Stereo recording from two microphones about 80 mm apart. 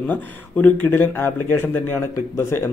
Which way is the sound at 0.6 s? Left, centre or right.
Left.